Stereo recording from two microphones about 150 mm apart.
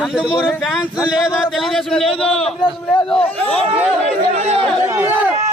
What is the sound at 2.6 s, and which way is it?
Speech, 35° left (ahead or behind).